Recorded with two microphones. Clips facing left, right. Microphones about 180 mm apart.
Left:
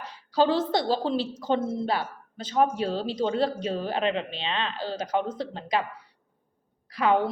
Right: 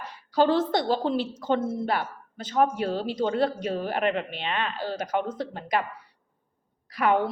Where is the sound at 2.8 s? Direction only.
55° right (ahead or behind).